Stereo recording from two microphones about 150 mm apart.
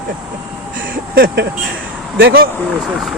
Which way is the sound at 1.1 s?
80° right.